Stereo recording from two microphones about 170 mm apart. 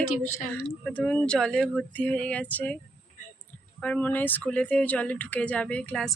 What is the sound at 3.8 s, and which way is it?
Speech, 10° left (ahead or behind).